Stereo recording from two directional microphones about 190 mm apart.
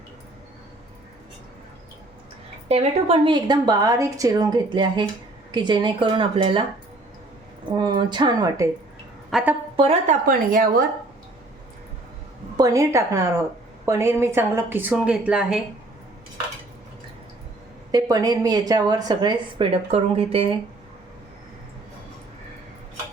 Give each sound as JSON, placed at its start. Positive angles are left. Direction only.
{"t": 2.6, "sound": "a woman's voice", "side_deg": -30}
{"t": 7.8, "sound": "a woman's voice", "side_deg": -25}
{"t": 9.7, "sound": "a woman's voice", "side_deg": -30}
{"t": 10.2, "sound": "a woman's voice", "side_deg": -45}
{"t": 12.5, "sound": "a woman's voice", "side_deg": -15}
{"t": 17.9, "sound": "a woman's voice", "side_deg": -20}